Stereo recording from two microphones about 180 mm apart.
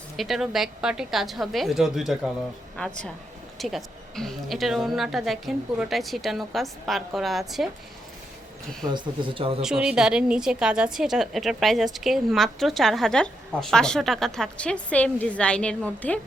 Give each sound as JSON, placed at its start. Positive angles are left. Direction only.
{"t": 0.2, "sound": "a woman's voice", "side_deg": 0}
{"t": 8.9, "sound": "speech", "side_deg": -25}
{"t": 9.6, "sound": "a woman's voice", "side_deg": -5}